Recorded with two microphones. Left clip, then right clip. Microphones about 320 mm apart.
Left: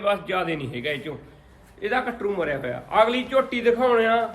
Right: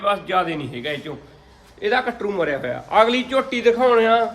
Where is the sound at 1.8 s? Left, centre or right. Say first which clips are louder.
Right 4 dB; right.